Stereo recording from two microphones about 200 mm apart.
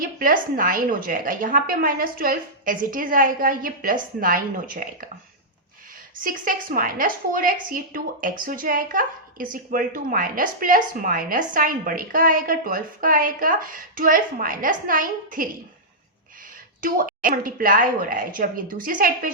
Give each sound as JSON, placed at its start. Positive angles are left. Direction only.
{"t": 0.0, "sound": "a woman's voice", "side_deg": -45}
{"t": 6.1, "sound": "a woman's voice", "side_deg": -45}
{"t": 16.8, "sound": "a woman's voice", "side_deg": -45}